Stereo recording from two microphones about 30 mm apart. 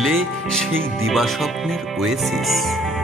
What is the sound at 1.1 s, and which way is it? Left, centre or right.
Speech, centre.